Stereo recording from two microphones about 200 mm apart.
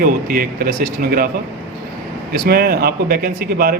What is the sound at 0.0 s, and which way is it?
A man's voice, 45° right (ahead or behind).